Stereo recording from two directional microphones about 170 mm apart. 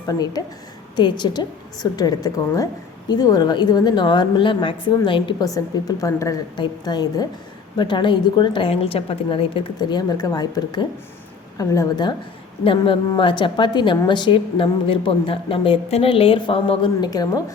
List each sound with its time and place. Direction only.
0.1 s a woman's voice: 25° left (ahead or behind)